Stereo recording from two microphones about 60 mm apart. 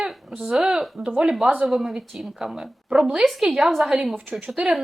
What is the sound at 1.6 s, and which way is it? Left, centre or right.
A woman's voice, centre.